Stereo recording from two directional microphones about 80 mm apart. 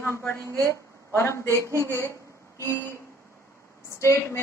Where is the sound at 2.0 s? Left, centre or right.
Left.